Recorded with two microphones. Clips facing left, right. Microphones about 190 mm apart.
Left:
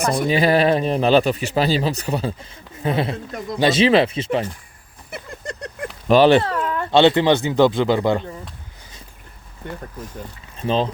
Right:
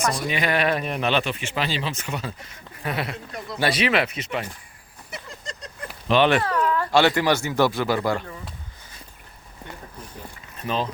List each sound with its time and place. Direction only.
0.3 s speech: 35° left (ahead or behind)
5.1 s a sound: 60° left (ahead or behind)
6.1 s speech: 35° left (ahead or behind)
10.6 s speech: 30° left (ahead or behind)